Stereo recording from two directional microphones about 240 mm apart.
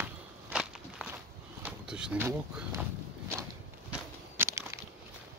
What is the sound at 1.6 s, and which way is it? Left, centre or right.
Speech, centre.